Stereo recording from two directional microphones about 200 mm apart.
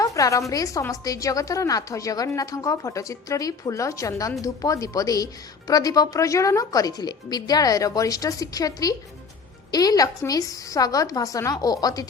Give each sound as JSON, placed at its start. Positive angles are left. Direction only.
{"t": 0.0, "sound": "a woman's voice", "side_deg": 15}